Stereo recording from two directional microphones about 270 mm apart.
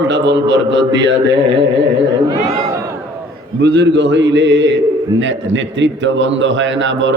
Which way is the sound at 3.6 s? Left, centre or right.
Right.